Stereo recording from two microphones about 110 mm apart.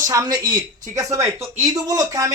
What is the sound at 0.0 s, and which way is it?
Speech, 30° right (ahead or behind).